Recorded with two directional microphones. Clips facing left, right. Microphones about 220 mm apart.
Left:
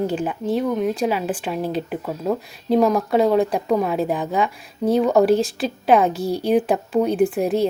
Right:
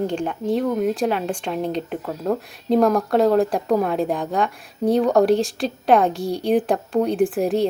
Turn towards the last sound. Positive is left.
turn(degrees=0)  # may be behind; listen again after turning